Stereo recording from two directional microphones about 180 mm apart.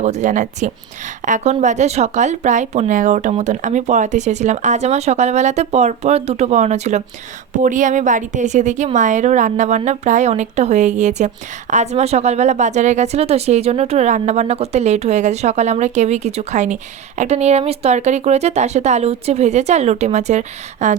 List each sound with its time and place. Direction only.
0.0 s speech: 40° right (ahead or behind)